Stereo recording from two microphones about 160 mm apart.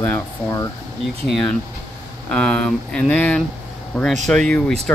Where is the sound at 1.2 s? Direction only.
Centre (ahead or behind).